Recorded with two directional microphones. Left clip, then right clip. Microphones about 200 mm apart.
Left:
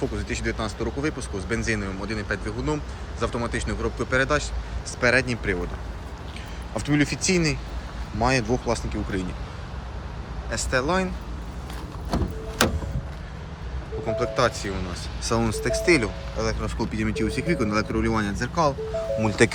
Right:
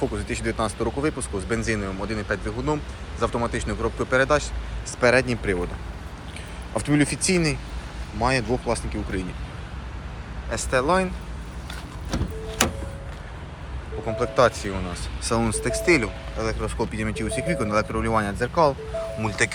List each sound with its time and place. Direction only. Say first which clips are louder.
0.0 s speech: right 1 dB; centre (ahead or behind)
6.7 s speech: right 1 dB; 5° left (ahead or behind)
10.5 s speech: right 2 dB; 5° left (ahead or behind)
14.1 s speech: right 3 dB; 5° left (ahead or behind)
15.2 s speech: even; 15° left (ahead or behind)
19.2 s speech: left 3 dB; 20° left (ahead or behind)